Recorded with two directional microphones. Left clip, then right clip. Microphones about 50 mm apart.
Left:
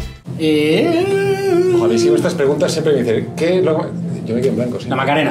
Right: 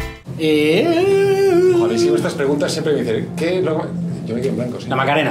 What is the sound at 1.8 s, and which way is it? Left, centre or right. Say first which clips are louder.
Speech: left 2 dB; centre.